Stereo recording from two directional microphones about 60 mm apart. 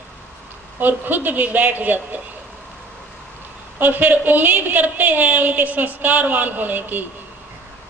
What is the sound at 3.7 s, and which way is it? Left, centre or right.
A woman's voice, right.